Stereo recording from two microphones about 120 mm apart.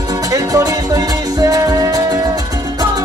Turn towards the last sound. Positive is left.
turn(degrees=-30)  # may be behind; listen again after turning